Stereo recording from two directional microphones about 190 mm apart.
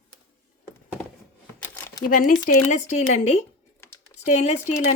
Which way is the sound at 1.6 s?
10° left (ahead or behind).